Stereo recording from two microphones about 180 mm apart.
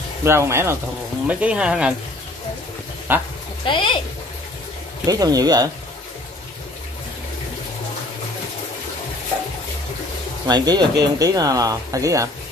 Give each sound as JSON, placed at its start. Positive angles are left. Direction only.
{"t": 0.2, "sound": "speech", "side_deg": -15}
{"t": 3.1, "sound": "speech", "side_deg": -10}
{"t": 3.6, "sound": "speech", "side_deg": 25}
{"t": 5.0, "sound": "speech", "side_deg": -20}
{"t": 10.4, "sound": "speech", "side_deg": -20}